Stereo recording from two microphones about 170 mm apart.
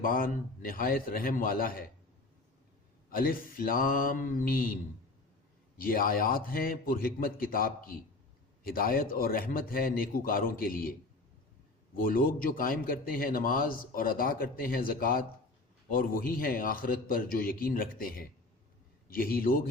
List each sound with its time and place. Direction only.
0.0 s a man's voice: 55° left (ahead or behind)
3.1 s a man's voice: 55° left (ahead or behind)
5.7 s a man's voice: 60° left (ahead or behind)
11.9 s a man's voice: 55° left (ahead or behind)
19.0 s a man's voice: 60° left (ahead or behind)